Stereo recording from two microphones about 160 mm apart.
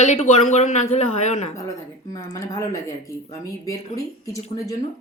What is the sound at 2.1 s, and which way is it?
Speech, 20° left (ahead or behind).